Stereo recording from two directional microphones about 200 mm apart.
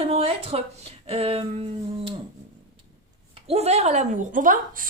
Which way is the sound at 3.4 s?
30° right (ahead or behind).